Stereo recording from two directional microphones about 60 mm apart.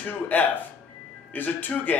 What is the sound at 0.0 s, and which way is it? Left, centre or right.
Speech, left.